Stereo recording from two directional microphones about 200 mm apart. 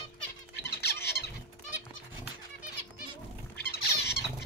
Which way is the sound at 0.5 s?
55° left (ahead or behind).